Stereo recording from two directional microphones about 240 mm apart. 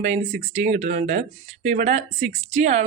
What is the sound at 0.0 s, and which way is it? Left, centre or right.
A woman's voice, right.